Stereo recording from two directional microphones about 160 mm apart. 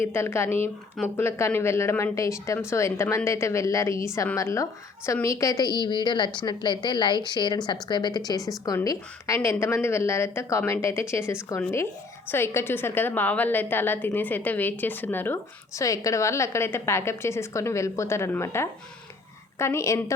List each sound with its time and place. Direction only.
0.0 s a woman's voice: 15° left (ahead or behind)